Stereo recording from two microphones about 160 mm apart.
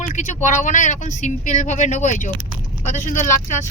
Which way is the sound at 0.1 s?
50° left (ahead or behind).